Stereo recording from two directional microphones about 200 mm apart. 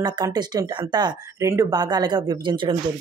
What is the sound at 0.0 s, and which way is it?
Speech, 20° right (ahead or behind).